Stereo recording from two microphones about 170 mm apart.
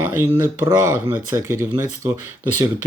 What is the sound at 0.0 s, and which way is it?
Speech, 15° right (ahead or behind).